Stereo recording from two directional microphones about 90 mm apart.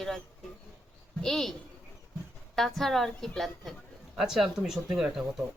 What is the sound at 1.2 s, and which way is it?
Speech, 5° left (ahead or behind).